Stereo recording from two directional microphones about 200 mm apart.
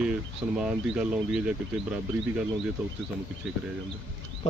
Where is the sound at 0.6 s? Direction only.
5° right (ahead or behind).